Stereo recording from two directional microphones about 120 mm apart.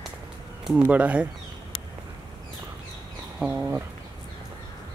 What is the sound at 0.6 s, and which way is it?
Speech, 10° right (ahead or behind).